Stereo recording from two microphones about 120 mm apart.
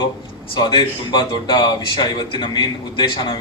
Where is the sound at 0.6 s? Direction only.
40° left (ahead or behind).